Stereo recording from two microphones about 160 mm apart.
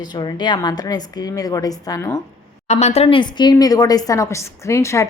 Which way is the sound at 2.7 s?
45° left (ahead or behind).